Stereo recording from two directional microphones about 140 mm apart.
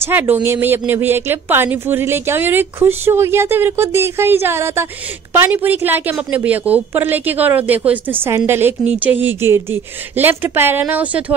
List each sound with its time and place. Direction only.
0.0 s a woman's voice: 15° right (ahead or behind)